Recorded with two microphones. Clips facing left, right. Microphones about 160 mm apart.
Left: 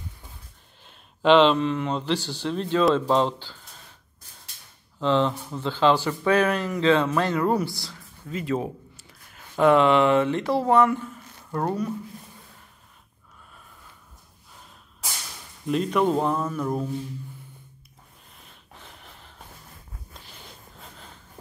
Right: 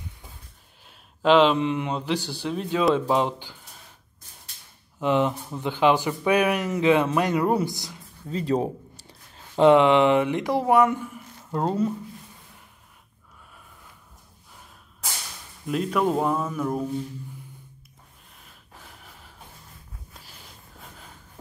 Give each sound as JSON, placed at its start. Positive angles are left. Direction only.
{"t": 0.8, "sound": "speech", "side_deg": -5}
{"t": 5.0, "sound": "speech", "side_deg": -15}
{"t": 8.3, "sound": "speech", "side_deg": -35}
{"t": 9.3, "sound": "speech", "side_deg": -25}
{"t": 15.6, "sound": "speech", "side_deg": -5}